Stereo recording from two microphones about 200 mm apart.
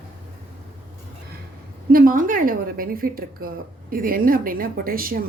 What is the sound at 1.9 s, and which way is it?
A woman's voice, 45° right (ahead or behind).